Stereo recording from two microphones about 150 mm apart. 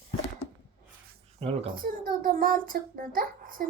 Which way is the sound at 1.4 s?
40° right (ahead or behind).